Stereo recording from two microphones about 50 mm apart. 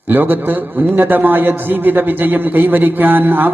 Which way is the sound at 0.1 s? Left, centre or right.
Right.